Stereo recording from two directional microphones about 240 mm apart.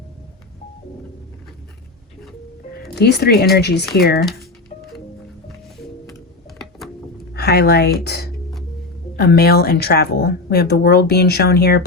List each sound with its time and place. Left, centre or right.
2.9 s a woman's voice: left
6.6 s a sound: centre
7.3 s a woman's voice: left